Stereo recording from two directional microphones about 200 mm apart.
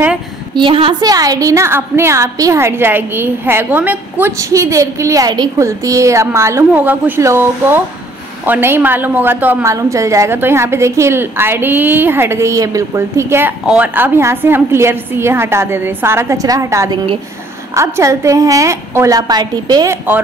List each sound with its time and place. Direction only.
0.6 s a woman's voice: 25° right (ahead or behind)